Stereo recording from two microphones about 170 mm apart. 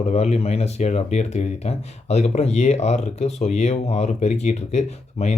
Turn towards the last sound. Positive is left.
turn(degrees=40)  # may be behind; listen again after turning